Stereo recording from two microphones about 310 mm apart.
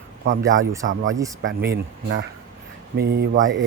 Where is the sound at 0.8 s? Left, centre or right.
Right.